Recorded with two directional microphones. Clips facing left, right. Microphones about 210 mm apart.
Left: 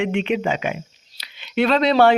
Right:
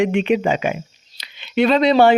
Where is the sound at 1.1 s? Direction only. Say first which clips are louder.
Right 3 dB; centre (ahead or behind).